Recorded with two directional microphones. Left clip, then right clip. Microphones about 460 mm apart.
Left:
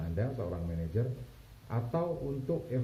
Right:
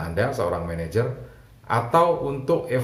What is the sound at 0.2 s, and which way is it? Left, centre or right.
Speech, centre.